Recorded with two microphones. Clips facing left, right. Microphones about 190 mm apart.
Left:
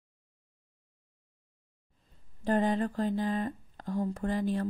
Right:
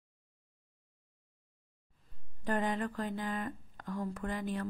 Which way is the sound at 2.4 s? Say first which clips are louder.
Left 6 dB; 30° left (ahead or behind).